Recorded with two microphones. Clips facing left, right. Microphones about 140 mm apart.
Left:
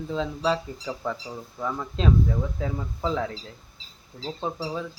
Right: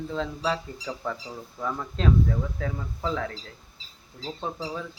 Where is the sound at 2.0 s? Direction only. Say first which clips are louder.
Left 1 dB; 15° left (ahead or behind).